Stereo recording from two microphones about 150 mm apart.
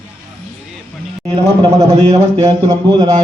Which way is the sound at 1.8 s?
45° right (ahead or behind).